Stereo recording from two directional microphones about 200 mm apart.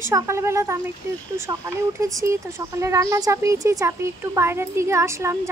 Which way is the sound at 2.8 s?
15° right (ahead or behind).